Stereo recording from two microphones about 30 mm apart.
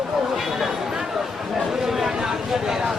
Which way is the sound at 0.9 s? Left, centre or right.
Centre.